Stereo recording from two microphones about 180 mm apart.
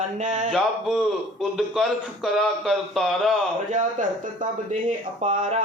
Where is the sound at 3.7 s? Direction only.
45° right (ahead or behind).